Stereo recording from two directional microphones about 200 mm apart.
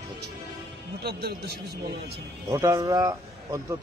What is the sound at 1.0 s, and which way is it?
Speech, 55° right (ahead or behind).